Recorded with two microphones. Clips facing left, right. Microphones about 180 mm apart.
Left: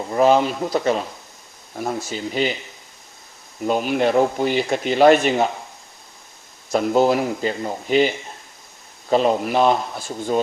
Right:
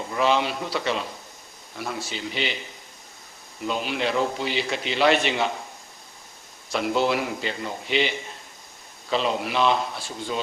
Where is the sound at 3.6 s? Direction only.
45° left (ahead or behind).